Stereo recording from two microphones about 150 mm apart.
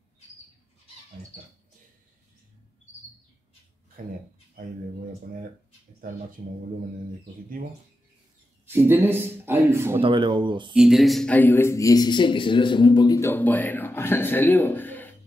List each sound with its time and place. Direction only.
4.0 s speech: 65° right (ahead or behind)
8.6 s speech: 15° right (ahead or behind)
10.0 s speech: 35° right (ahead or behind)
10.7 s speech: 5° right (ahead or behind); by 13.2 s 30° left (ahead or behind)
13.2 s a man's voice: 10° left (ahead or behind)